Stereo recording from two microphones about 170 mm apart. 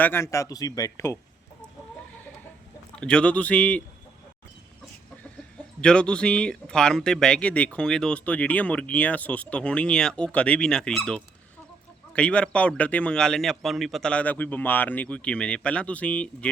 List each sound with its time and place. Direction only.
0.0 s a man's voice: 15° left (ahead or behind)
2.9 s a man's voice: 5° left (ahead or behind)
5.8 s a man's voice: 5° left (ahead or behind)